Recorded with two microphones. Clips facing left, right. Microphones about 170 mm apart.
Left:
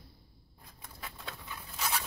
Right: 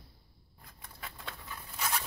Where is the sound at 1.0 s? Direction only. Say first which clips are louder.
Left 1 dB; 5° left (ahead or behind).